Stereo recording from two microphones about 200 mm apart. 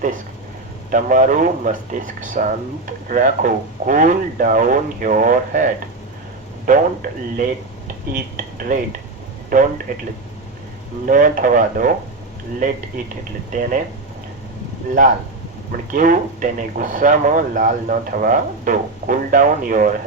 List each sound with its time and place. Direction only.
0.9 s speech: 40° right (ahead or behind)
11.0 s speech: 40° right (ahead or behind)
13.5 s speech: 40° right (ahead or behind)
15.7 s speech: 45° right (ahead or behind)